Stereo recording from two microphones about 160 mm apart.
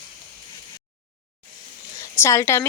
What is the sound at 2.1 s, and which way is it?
Speech, 20° left (ahead or behind).